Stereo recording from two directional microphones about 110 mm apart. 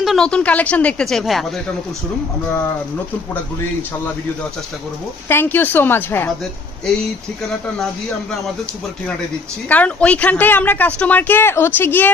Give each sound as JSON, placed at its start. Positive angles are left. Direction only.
{"t": 0.0, "sound": "speech", "side_deg": 5}
{"t": 5.3, "sound": "speech", "side_deg": 20}
{"t": 9.7, "sound": "speech", "side_deg": 10}